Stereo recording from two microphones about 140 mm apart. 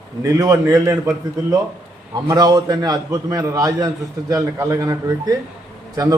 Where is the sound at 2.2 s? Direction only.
25° right (ahead or behind).